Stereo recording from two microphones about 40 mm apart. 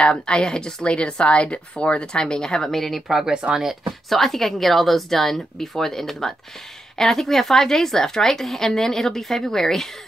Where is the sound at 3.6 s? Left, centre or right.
Centre.